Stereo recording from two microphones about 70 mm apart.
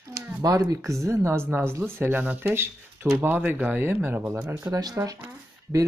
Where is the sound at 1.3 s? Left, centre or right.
Right.